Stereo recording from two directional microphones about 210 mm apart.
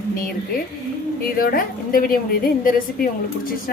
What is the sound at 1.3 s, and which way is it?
A woman's voice, 45° left (ahead or behind).